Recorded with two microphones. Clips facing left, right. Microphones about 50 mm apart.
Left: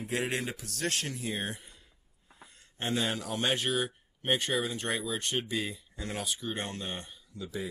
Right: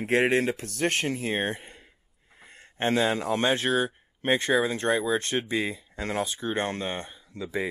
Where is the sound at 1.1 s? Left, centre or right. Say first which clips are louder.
Right 7 dB; right.